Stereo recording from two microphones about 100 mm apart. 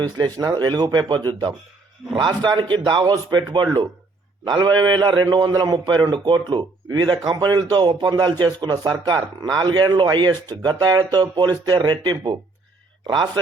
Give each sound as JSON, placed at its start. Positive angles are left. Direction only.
{"t": 0.3, "sound": "a man's voice", "side_deg": -40}